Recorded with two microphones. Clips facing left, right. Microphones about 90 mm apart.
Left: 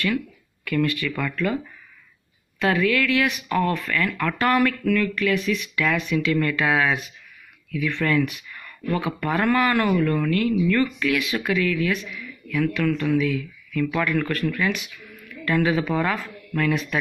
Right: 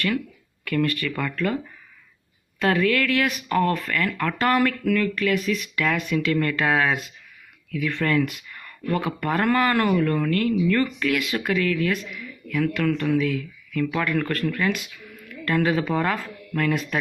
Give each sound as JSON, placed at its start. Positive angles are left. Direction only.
{"t": 0.7, "sound": "speech", "side_deg": -45}
{"t": 2.6, "sound": "speech", "side_deg": -45}